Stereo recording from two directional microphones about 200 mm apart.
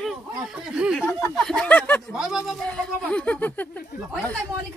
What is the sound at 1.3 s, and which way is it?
Speech, 5° left (ahead or behind).